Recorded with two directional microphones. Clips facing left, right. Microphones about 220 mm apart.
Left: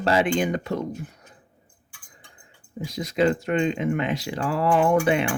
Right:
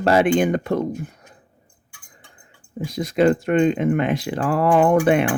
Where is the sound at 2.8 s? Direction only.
55° right (ahead or behind).